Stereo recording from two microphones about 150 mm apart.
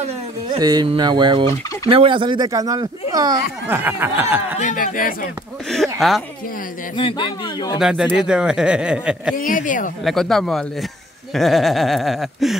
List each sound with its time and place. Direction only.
0.5 s a sound: 25° right (ahead or behind)
0.8 s fowl: 30° right (ahead or behind)
3.6 s a sound: 15° right (ahead or behind)
4.6 s speech: 65° left (ahead or behind)
5.7 s speech: centre (ahead or behind)
7.0 s a man's voice: 35° left (ahead or behind)
7.8 s speech: 5° right (ahead or behind)
9.4 s speech: 65° left (ahead or behind)
10.0 s speech: centre (ahead or behind)